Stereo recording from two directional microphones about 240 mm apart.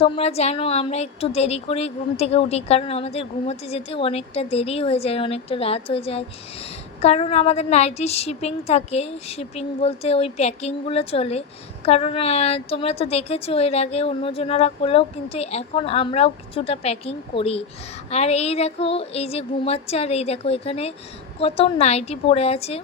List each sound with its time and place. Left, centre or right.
0.0 s a woman's voice: left